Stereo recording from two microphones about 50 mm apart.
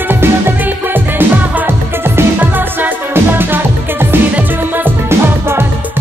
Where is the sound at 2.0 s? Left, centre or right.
Right.